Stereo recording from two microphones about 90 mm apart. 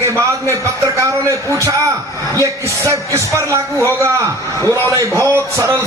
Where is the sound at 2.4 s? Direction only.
35° right (ahead or behind).